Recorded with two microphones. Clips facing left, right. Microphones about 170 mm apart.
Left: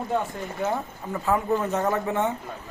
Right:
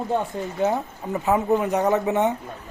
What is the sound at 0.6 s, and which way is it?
Speech, 20° right (ahead or behind).